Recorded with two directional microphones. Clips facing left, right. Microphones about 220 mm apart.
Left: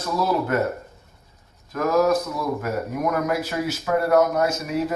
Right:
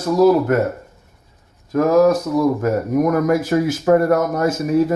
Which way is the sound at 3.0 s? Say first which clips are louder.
Right 8 dB; 45° right (ahead or behind).